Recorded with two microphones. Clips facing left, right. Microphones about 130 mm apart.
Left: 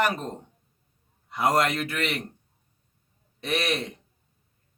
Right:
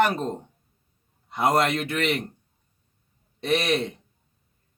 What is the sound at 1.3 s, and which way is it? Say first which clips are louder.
Speech: right 2 dB; 25° right (ahead or behind).